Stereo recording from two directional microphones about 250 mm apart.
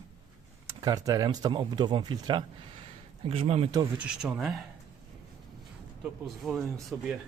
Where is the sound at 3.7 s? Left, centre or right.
Centre.